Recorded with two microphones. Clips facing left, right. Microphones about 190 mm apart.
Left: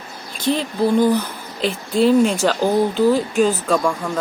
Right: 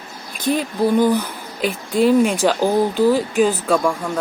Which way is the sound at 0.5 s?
10° right (ahead or behind).